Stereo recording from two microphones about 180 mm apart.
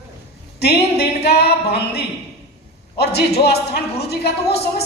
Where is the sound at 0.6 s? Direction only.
65° left (ahead or behind).